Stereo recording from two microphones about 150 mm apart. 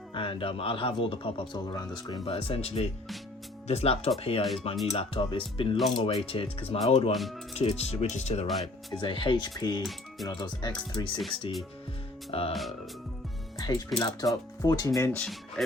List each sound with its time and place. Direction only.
0.1 s a man's voice: 35° left (ahead or behind)
7.1 s speech: centre (ahead or behind)
7.5 s speech: 45° left (ahead or behind)
8.9 s a man's voice: 35° left (ahead or behind)
13.6 s speech: 25° left (ahead or behind)
15.2 s speech: centre (ahead or behind)